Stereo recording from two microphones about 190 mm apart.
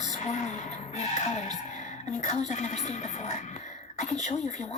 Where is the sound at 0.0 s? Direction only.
40° left (ahead or behind).